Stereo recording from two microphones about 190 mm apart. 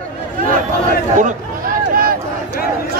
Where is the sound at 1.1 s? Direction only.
40° right (ahead or behind).